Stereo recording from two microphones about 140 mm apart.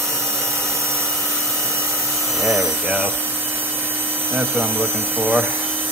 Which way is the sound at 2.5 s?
Centre (ahead or behind).